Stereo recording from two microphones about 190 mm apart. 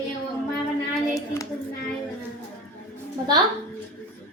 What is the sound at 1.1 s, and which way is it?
Hands, 15° left (ahead or behind).